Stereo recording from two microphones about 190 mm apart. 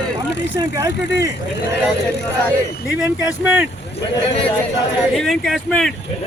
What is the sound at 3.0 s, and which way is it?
Speech, 10° right (ahead or behind).